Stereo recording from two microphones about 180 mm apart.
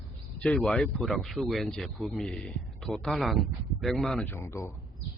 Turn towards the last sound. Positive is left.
turn(degrees=15)  # may be behind; listen again after turning